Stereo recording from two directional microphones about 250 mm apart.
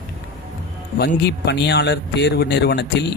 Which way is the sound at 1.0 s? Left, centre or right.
Left.